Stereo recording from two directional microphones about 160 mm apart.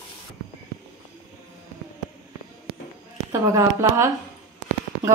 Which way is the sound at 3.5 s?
20° right (ahead or behind).